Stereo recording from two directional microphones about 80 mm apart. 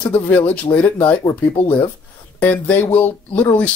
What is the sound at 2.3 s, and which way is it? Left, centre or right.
Speech, centre.